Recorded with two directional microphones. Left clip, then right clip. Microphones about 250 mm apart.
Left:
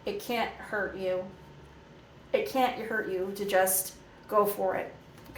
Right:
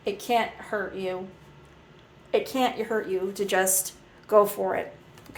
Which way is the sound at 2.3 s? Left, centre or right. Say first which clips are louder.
Right 2 dB; right.